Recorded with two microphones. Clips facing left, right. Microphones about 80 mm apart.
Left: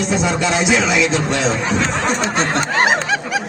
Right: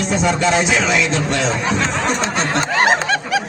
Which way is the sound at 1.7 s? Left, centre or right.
Centre.